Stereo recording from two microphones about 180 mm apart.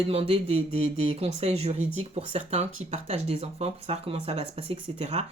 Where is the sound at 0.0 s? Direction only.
35° right (ahead or behind).